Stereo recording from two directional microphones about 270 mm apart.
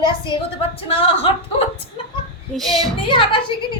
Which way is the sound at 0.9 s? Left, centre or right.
Left.